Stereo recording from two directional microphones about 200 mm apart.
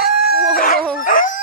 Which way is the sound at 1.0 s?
45° left (ahead or behind).